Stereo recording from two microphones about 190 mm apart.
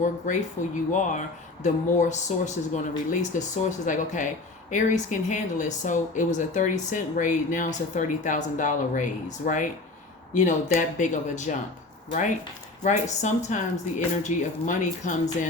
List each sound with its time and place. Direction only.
0.0 s speech: 40° left (ahead or behind)
12.8 s speech: 40° left (ahead or behind)